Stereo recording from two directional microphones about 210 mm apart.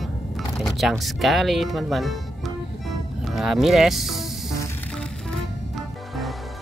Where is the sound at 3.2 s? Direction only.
Centre (ahead or behind).